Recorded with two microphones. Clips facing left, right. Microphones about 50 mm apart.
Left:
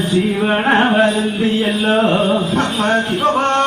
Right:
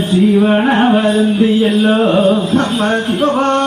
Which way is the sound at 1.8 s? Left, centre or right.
Centre.